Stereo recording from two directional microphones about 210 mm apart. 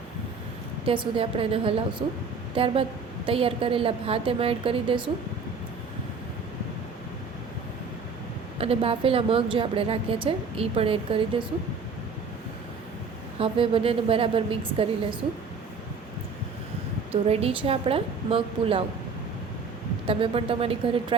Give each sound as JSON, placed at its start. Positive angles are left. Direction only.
{"t": 0.9, "sound": "a woman's voice", "side_deg": -25}
{"t": 8.5, "sound": "a woman's voice", "side_deg": -25}
{"t": 13.4, "sound": "a woman's voice", "side_deg": -25}
{"t": 17.1, "sound": "a woman's voice", "side_deg": -30}
{"t": 20.1, "sound": "a woman's voice", "side_deg": -25}